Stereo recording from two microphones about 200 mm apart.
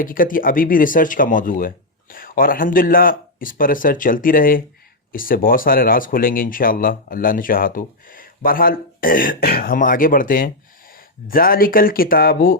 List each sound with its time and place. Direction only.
0.0 s speech: 45° left (ahead or behind)